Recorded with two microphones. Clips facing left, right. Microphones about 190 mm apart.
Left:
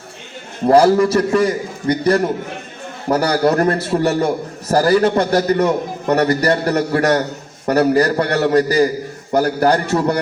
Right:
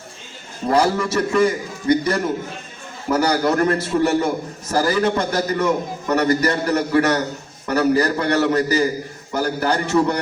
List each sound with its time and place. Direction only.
0.7 s a man's voice: 35° left (ahead or behind)
3.1 s a man's voice: 35° left (ahead or behind)